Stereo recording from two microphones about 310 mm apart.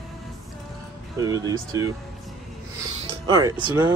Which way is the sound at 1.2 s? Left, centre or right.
Centre.